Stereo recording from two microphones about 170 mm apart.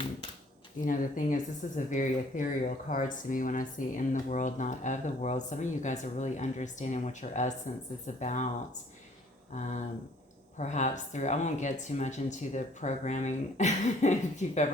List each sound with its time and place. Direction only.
0.9 s speech: 50° left (ahead or behind)
9.6 s speech: 45° left (ahead or behind)